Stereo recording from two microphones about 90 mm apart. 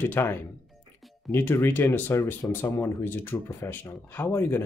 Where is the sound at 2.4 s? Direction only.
40° left (ahead or behind).